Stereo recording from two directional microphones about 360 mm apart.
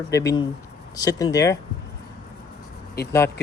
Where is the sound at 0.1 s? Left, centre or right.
Centre.